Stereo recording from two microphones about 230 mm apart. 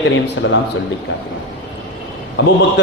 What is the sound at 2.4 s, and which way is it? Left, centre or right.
Speech, left.